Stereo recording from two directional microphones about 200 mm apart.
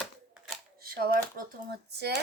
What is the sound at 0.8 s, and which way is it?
Shuffling cards, 50° right (ahead or behind).